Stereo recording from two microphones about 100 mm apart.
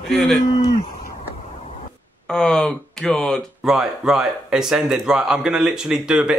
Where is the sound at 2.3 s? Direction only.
5° left (ahead or behind).